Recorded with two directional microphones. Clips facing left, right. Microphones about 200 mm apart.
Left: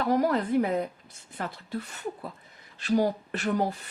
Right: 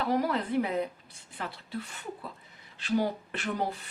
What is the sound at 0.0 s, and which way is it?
A woman's voice, 45° left (ahead or behind).